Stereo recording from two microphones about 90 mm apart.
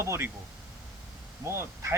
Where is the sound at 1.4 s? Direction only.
30° right (ahead or behind).